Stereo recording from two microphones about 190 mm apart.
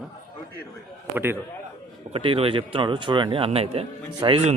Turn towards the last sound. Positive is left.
turn(degrees=-30)  # may be behind; listen again after turning